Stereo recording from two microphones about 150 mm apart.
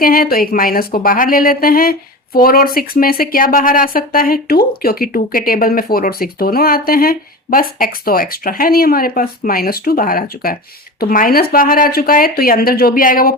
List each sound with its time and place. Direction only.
0.0 s speech: 70° left (ahead or behind)